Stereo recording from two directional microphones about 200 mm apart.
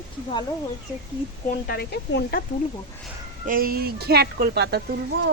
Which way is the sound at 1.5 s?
50° left (ahead or behind).